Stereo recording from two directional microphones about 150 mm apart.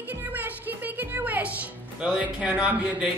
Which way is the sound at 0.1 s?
10° right (ahead or behind).